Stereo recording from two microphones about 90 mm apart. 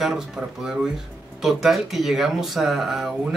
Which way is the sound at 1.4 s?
5° right (ahead or behind).